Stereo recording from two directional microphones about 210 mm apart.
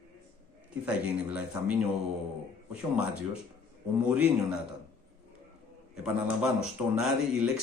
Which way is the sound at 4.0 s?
5° right (ahead or behind).